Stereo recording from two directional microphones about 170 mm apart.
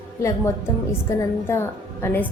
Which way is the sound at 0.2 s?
15° left (ahead or behind).